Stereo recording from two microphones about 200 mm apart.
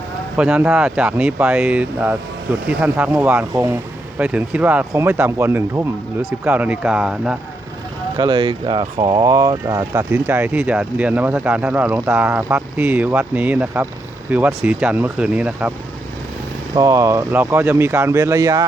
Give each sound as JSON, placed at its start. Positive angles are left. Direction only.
{"t": 0.3, "sound": "speech", "side_deg": -5}
{"t": 8.1, "sound": "speech", "side_deg": -20}
{"t": 16.7, "sound": "speech", "side_deg": -15}